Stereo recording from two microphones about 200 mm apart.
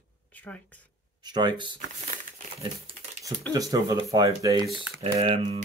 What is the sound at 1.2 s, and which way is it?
Speech, 20° right (ahead or behind).